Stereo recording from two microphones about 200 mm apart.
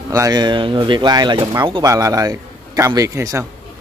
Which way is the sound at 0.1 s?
20° right (ahead or behind).